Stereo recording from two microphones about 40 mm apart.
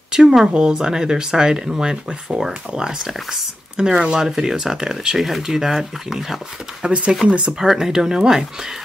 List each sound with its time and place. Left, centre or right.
0.1 s speech: centre
5.1 s speech: centre
7.2 s speech: right
7.6 s speech: centre